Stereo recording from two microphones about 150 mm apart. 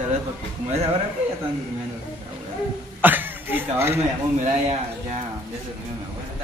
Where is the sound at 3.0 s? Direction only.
15° right (ahead or behind).